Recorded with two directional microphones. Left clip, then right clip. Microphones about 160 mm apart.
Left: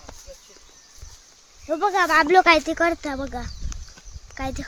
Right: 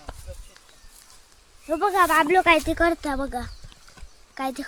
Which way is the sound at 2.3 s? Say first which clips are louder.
Left 3 dB; 40° left (ahead or behind).